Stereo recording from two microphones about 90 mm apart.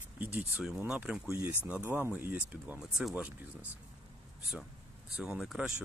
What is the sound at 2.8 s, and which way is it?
Speech, 5° right (ahead or behind).